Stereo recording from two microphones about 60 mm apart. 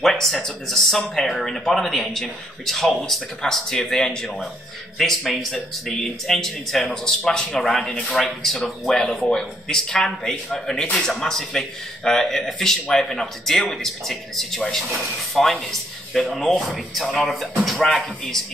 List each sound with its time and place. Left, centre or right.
0.0 s speech: centre
8.9 s speech: centre
9.3 s speech: centre